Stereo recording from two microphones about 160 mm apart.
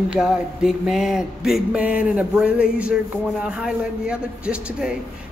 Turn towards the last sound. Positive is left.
turn(degrees=-5)  # may be behind; listen again after turning